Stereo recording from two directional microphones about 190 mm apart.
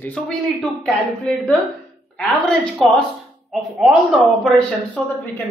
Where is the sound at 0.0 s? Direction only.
5° left (ahead or behind).